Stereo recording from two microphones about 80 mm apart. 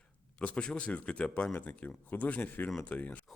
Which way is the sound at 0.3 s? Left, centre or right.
Centre.